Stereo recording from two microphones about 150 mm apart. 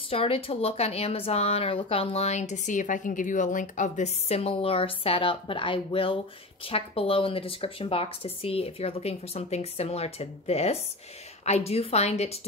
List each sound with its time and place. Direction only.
0.1 s a woman's voice: 40° left (ahead or behind)